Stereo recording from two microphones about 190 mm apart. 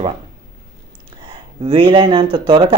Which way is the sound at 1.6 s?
25° right (ahead or behind).